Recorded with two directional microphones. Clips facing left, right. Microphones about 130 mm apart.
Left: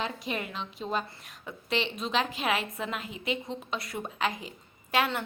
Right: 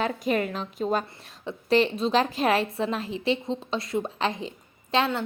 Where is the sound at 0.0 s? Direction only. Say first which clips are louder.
Right 8 dB; 45° right (ahead or behind).